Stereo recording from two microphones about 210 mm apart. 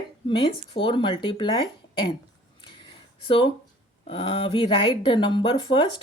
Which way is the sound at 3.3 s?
25° left (ahead or behind).